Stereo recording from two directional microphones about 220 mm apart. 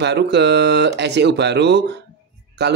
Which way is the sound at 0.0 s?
50° right (ahead or behind).